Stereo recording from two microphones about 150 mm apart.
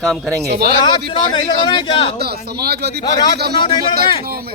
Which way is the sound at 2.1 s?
90° right.